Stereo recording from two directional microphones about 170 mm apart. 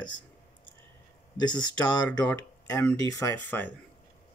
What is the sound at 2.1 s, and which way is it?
Speech, 15° left (ahead or behind).